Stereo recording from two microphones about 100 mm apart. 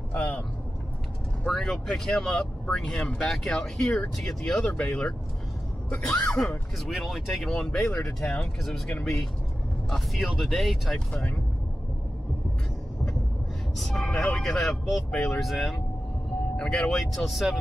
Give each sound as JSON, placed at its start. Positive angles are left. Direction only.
{"t": 0.1, "sound": "a sound", "side_deg": 25}
{"t": 1.4, "sound": "speech", "side_deg": 0}
{"t": 6.2, "sound": "speech", "side_deg": 5}
{"t": 9.8, "sound": "speech", "side_deg": 0}
{"t": 13.7, "sound": "speech", "side_deg": 5}